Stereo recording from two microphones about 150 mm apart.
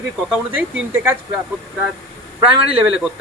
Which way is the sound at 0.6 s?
15° right (ahead or behind).